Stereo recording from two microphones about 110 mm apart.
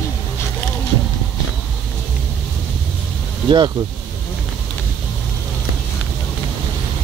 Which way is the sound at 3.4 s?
45° right (ahead or behind).